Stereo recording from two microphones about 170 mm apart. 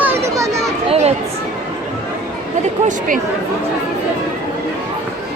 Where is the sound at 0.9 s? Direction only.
40° right (ahead or behind).